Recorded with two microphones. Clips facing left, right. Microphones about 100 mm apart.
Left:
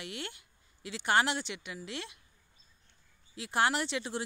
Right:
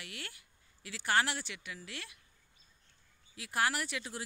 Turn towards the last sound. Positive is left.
turn(degrees=25)  # may be behind; listen again after turning